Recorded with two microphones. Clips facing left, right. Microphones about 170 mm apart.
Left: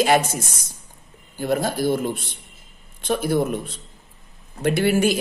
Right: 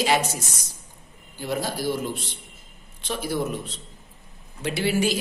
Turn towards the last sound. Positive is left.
turn(degrees=50)  # may be behind; listen again after turning